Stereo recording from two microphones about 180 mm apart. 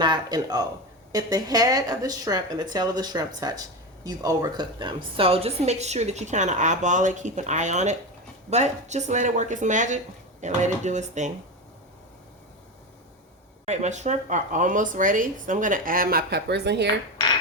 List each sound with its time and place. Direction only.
0.0 s speech: 25° right (ahead or behind); by 10.0 s 45° right (ahead or behind)
10.4 s dishes: 40° right (ahead or behind)
13.7 s speech: 40° right (ahead or behind); by 16.9 s 70° right (ahead or behind)